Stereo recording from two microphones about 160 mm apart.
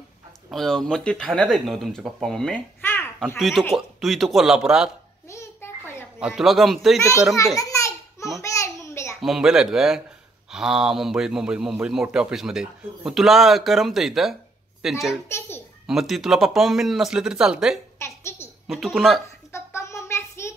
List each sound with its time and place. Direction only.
0.5 s a man's voice: centre (ahead or behind)
3.3 s a man's voice: centre (ahead or behind)
5.3 s music: 15° left (ahead or behind)
6.1 s a man's voice: 5° right (ahead or behind)
7.5 s a sound: 20° left (ahead or behind)
8.4 s babbling: 20° left (ahead or behind)
9.2 s a man's voice: centre (ahead or behind)
15.2 s a sound: 15° left (ahead or behind)
15.9 s a man's voice: centre (ahead or behind)
17.9 s a sound: 15° left (ahead or behind)
18.7 s a man's voice: centre (ahead or behind)
19.5 s a sound: 20° left (ahead or behind)